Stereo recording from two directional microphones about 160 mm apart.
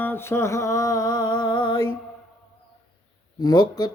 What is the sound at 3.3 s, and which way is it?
Speech, 25° left (ahead or behind).